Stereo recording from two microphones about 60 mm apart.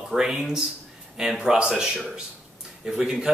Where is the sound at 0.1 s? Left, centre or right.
Centre.